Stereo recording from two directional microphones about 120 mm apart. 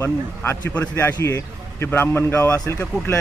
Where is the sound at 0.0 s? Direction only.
20° left (ahead or behind).